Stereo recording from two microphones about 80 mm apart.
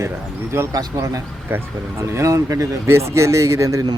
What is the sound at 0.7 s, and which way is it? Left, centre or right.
Speech, right.